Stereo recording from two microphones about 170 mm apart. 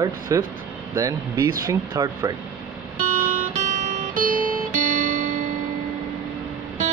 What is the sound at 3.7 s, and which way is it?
Music, 50° right (ahead or behind).